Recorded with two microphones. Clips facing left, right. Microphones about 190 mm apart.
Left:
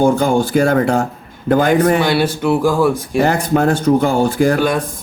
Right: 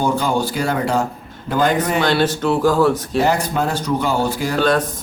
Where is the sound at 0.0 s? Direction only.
50° left (ahead or behind).